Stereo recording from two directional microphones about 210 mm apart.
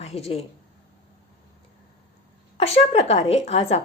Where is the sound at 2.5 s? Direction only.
30° left (ahead or behind).